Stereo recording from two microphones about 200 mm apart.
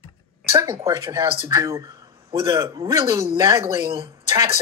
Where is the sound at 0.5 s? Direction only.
25° right (ahead or behind).